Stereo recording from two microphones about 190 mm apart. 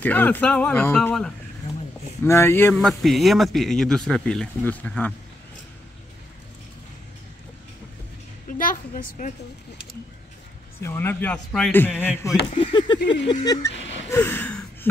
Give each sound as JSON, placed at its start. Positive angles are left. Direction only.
{"t": 0.0, "sound": "speech", "side_deg": 10}
{"t": 2.8, "sound": "speech", "side_deg": 0}
{"t": 8.5, "sound": "a woman's voice", "side_deg": 45}
{"t": 10.8, "sound": "speech", "side_deg": 10}
{"t": 12.5, "sound": "a sound", "side_deg": 25}
{"t": 13.3, "sound": "speech", "side_deg": 20}
{"t": 13.7, "sound": "a sound", "side_deg": 70}
{"t": 14.1, "sound": "gasp", "side_deg": 10}